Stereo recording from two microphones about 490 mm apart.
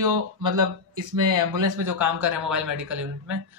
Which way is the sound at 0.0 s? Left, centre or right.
Right.